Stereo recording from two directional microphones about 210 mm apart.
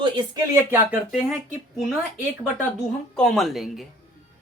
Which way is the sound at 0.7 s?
10° right (ahead or behind).